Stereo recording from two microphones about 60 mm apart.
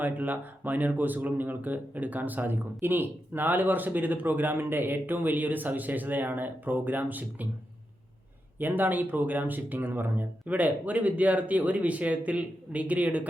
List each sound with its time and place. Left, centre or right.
0.0 s speech: right
8.5 s speech: right